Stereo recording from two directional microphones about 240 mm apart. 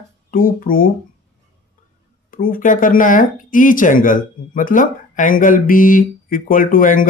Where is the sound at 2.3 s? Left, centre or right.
Left.